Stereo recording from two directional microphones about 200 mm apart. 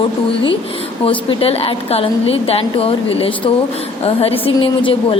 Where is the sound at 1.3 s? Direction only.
30° left (ahead or behind).